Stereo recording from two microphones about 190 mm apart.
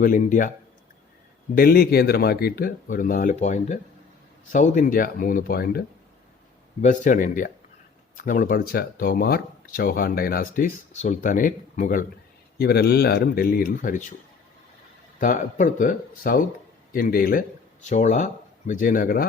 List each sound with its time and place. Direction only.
0.0 s speech: 45° left (ahead or behind)
1.5 s speech: 55° left (ahead or behind)
6.8 s speech: 45° left (ahead or behind)
12.5 s speech: 55° left (ahead or behind)
15.2 s speech: 40° left (ahead or behind)
17.8 s speech: 40° left (ahead or behind)